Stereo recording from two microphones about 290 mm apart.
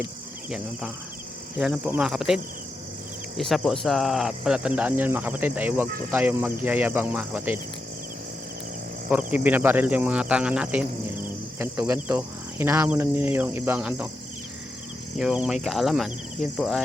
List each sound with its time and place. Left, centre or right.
1.5 s speech: centre
9.0 s speech: centre
15.2 s speech: centre